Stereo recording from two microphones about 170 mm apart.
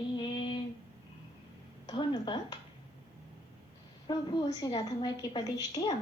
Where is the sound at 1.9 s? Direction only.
25° left (ahead or behind).